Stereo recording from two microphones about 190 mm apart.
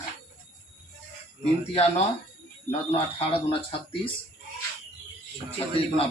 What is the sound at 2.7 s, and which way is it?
Speech, 30° left (ahead or behind).